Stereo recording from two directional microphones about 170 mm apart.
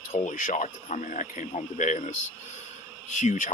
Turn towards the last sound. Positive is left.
turn(degrees=45)  # may be behind; listen again after turning